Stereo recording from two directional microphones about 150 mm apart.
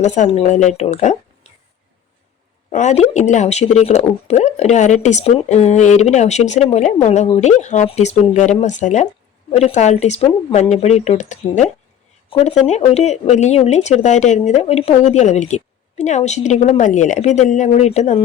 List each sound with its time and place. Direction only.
0.0 s speech: 50° left (ahead or behind)
2.7 s speech: 50° left (ahead or behind)